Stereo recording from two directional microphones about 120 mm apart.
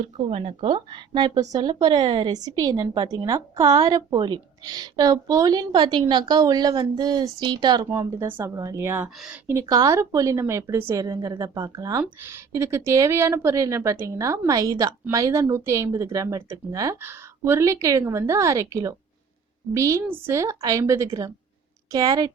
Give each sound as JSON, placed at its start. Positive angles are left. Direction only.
{"t": 0.3, "sound": "speech", "side_deg": -50}
{"t": 8.4, "sound": "a woman's voice", "side_deg": -25}